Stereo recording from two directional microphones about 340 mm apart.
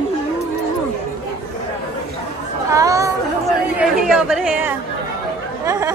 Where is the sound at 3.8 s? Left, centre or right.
Centre.